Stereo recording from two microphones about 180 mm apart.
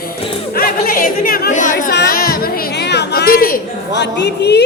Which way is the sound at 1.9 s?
55° left (ahead or behind).